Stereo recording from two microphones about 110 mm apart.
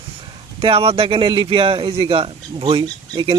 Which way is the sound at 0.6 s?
55° right (ahead or behind).